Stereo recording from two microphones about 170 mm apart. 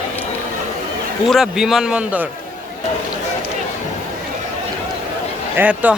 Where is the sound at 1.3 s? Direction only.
Centre (ahead or behind).